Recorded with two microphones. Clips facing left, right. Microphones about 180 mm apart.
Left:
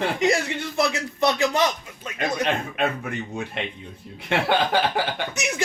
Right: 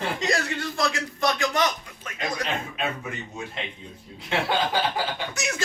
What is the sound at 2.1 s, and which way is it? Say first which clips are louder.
Speech: left 5 dB; 60° left (ahead or behind).